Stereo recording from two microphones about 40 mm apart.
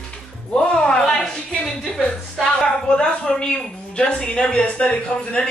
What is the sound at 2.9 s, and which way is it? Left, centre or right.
A woman's voice, left.